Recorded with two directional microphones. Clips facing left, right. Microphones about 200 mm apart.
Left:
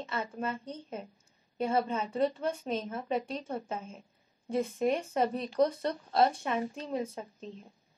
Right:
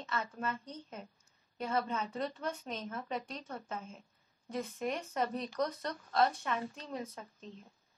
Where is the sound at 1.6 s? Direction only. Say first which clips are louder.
Left 5 dB; 25° left (ahead or behind).